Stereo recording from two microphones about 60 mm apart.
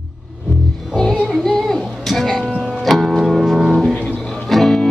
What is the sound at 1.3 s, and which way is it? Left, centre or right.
Music, centre.